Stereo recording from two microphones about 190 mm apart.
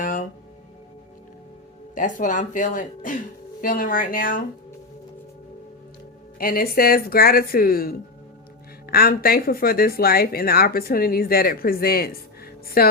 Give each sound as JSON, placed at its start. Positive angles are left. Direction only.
{"t": 0.0, "sound": "music", "side_deg": 45}
{"t": 2.0, "sound": "speech", "side_deg": 45}
{"t": 6.4, "sound": "speech", "side_deg": 50}